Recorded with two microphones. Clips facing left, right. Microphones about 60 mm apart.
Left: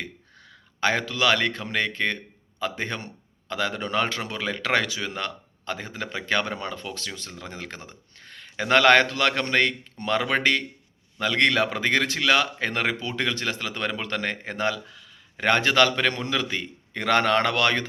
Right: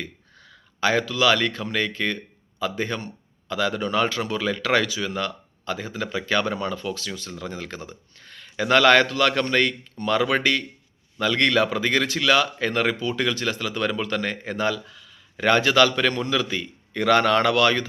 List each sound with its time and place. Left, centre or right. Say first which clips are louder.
0.0 s a man's voice: right 1 dB; left
13.0 s speech: right 4 dB; left
13.2 s a man's voice: right 3 dB; left